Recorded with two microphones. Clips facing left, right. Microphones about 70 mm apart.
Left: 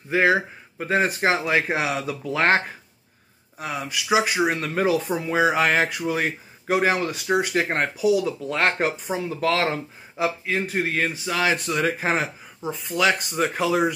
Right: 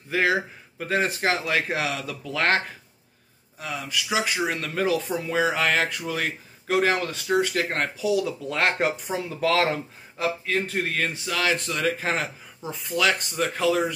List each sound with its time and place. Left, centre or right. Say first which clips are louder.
0.3 s speech: left 3 dB; left
3.6 s speech: left 3 dB; left
3.9 s speech: left 5 dB; centre
12.6 s speech: left 2 dB; centre